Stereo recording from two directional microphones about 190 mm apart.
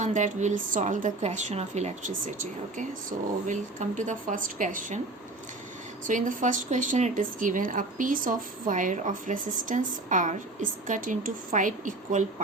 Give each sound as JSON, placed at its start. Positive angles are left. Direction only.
{"t": 0.0, "sound": "speech", "side_deg": -40}
{"t": 6.1, "sound": "speech", "side_deg": -40}